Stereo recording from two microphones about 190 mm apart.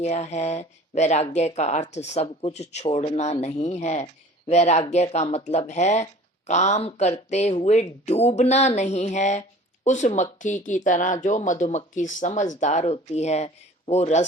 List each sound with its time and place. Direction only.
0.0 s speech: 35° left (ahead or behind)